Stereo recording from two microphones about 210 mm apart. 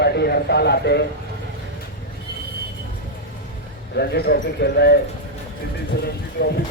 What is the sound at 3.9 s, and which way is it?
Speech, 50° left (ahead or behind).